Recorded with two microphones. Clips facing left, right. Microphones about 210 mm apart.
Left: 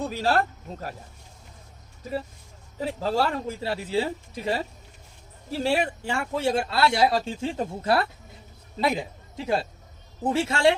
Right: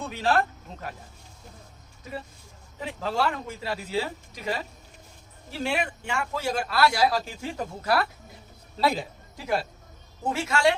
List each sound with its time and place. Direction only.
0.0 s speech: 40° left (ahead or behind)
2.7 s a man's voice: 35° left (ahead or behind)